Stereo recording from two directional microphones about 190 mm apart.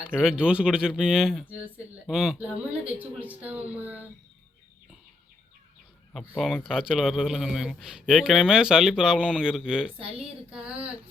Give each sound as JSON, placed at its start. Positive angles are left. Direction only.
{"t": 0.1, "sound": "a man's voice", "side_deg": 0}
{"t": 6.1, "sound": "a man's voice", "side_deg": 0}